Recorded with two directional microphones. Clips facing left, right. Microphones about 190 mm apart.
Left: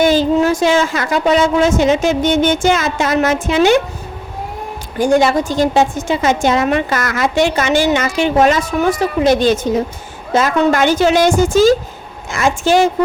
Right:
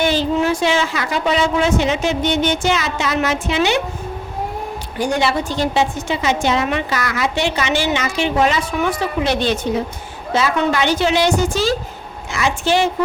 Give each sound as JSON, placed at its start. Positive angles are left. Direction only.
{"t": 0.0, "sound": "a woman's voice", "side_deg": 45}
{"t": 4.9, "sound": "a woman's voice", "side_deg": 45}